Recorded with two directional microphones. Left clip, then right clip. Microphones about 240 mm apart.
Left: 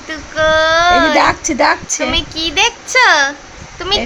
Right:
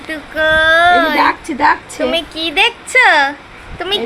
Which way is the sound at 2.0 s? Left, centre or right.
Centre.